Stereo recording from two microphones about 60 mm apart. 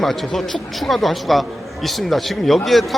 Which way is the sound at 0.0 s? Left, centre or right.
Centre.